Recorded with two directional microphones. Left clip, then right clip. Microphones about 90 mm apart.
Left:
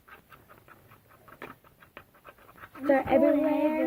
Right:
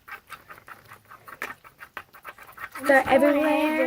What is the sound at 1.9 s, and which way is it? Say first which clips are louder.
Pant: right 9 dB; 20° right (ahead or behind).